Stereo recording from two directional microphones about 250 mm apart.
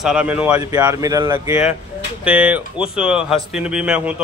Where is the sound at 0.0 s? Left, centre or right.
Centre.